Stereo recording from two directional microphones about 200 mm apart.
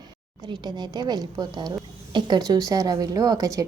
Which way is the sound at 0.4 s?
20° right (ahead or behind).